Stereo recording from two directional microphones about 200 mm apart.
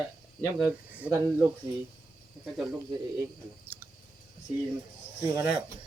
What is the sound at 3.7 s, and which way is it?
Clicking, 10° right (ahead or behind).